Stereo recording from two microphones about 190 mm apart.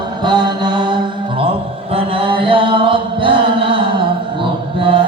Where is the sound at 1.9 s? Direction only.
30° right (ahead or behind).